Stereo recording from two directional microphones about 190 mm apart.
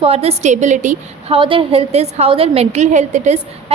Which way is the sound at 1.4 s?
25° right (ahead or behind).